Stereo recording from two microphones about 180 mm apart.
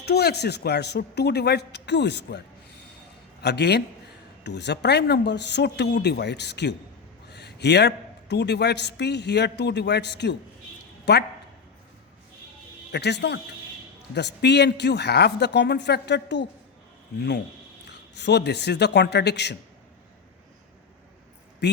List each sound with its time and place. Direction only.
0.0 s speech: 65° left (ahead or behind)
3.4 s a man's voice: 65° left (ahead or behind)
12.9 s speech: 70° left (ahead or behind)
21.6 s speech: 70° left (ahead or behind)